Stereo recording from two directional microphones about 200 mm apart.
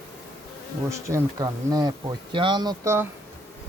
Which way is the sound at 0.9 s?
15° right (ahead or behind).